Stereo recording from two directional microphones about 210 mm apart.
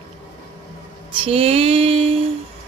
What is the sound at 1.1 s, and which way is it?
A woman's voice, 25° right (ahead or behind).